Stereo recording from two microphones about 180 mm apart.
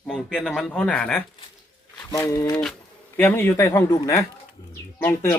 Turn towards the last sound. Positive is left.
turn(degrees=10)  # may be behind; listen again after turning